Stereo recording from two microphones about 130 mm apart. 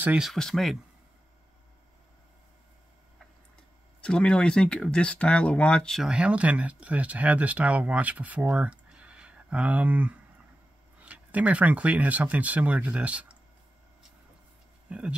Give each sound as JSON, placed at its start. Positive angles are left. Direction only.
{"t": 0.0, "sound": "speech", "side_deg": -10}
{"t": 0.3, "sound": "speech", "side_deg": 0}
{"t": 4.0, "sound": "speech", "side_deg": 10}
{"t": 14.9, "sound": "speech", "side_deg": -10}